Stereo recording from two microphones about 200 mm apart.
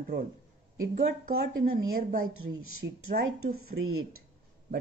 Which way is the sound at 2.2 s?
90° right.